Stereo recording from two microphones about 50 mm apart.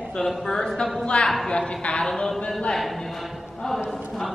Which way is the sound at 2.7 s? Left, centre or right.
Centre.